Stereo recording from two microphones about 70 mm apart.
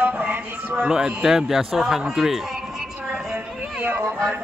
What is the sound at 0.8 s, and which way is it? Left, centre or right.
A man's voice, centre.